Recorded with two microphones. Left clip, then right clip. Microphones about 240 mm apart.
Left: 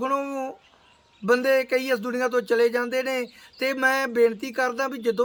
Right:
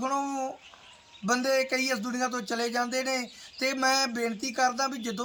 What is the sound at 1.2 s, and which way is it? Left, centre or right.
Speech, left.